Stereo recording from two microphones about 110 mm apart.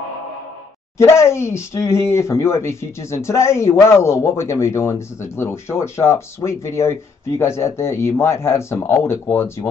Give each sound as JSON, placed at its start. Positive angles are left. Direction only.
{"t": 0.9, "sound": "speech", "side_deg": 25}